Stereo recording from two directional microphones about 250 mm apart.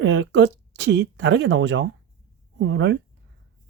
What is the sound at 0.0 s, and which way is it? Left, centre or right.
Speech, right.